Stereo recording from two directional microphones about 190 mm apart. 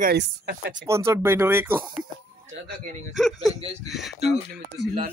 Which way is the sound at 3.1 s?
Centre (ahead or behind).